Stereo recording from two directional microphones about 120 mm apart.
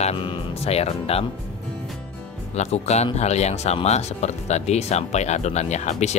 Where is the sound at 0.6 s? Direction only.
60° left (ahead or behind).